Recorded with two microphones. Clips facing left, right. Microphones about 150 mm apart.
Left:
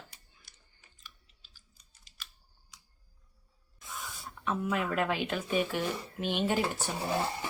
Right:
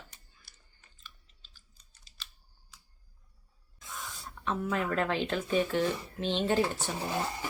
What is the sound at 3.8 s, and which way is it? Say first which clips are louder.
Speech: even; 10° left (ahead or behind).